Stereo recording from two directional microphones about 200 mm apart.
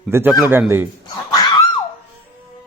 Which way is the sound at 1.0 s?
20° left (ahead or behind).